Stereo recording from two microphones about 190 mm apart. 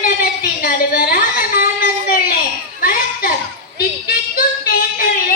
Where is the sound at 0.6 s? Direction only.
50° left (ahead or behind).